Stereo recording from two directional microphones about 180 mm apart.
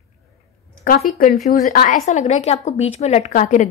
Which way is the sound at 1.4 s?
45° left (ahead or behind).